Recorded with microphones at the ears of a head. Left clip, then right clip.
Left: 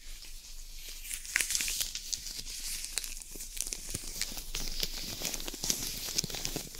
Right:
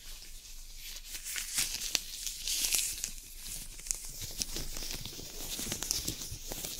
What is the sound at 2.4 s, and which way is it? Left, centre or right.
Crumpling, right.